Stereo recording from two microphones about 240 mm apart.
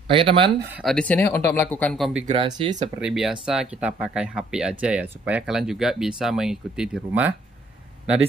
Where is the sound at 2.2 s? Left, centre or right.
Right.